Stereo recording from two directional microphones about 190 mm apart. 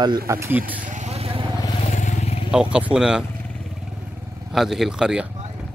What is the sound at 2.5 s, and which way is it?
Speech, 5° right (ahead or behind).